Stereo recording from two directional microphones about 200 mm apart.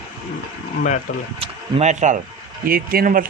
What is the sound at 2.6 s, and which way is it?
Speech, 45° right (ahead or behind).